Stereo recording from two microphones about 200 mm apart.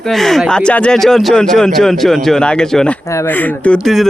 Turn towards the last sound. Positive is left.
turn(degrees=0)  # may be behind; listen again after turning